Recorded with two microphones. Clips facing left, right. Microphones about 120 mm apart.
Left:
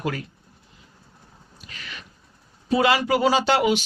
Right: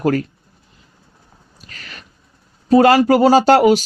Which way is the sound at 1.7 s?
40° right (ahead or behind).